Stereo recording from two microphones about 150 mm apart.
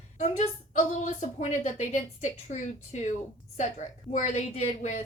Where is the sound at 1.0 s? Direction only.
55° left (ahead or behind).